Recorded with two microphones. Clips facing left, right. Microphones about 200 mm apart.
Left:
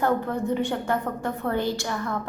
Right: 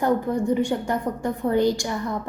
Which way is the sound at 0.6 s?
15° right (ahead or behind).